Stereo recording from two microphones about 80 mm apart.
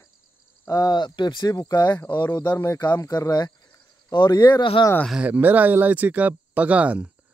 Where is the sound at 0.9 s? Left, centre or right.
Left.